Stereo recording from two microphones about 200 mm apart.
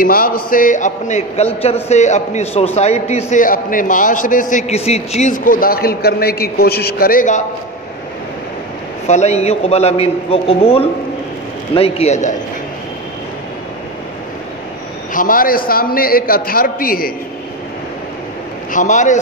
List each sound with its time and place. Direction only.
0.0 s a man's voice: 45° left (ahead or behind)
9.0 s a man's voice: 35° left (ahead or behind)
15.1 s a man's voice: 45° left (ahead or behind)
18.7 s a man's voice: 40° left (ahead or behind)